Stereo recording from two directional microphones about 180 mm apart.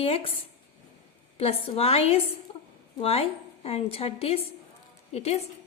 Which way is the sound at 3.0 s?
35° left (ahead or behind).